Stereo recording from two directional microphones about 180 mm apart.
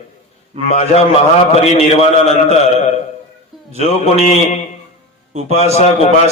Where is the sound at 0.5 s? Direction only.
35° right (ahead or behind).